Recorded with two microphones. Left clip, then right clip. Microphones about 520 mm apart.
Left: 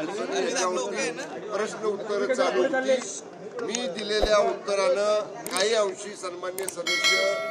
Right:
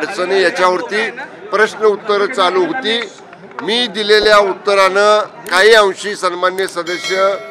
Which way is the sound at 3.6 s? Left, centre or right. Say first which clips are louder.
Right 17 dB; right.